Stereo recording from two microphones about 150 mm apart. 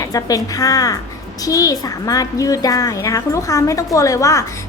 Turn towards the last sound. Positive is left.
turn(degrees=20)  # may be behind; listen again after turning